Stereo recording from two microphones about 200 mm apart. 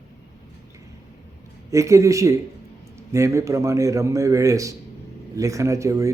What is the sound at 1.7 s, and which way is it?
A man's voice, 15° right (ahead or behind).